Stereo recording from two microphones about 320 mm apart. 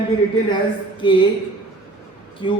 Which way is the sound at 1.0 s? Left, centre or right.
Centre.